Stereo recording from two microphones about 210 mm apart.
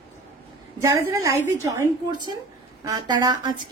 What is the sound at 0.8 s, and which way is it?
A woman's voice, 15° right (ahead or behind).